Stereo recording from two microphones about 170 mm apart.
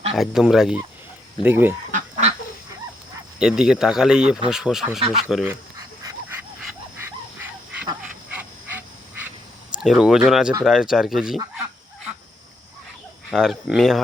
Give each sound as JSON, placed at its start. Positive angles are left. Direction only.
{"t": 0.1, "sound": "speech", "side_deg": 0}
{"t": 1.9, "sound": "goose", "side_deg": -50}
{"t": 3.3, "sound": "speech", "side_deg": -5}
{"t": 6.0, "sound": "dog", "side_deg": -20}
{"t": 9.7, "sound": "speech", "side_deg": -5}
{"t": 13.3, "sound": "speech", "side_deg": 0}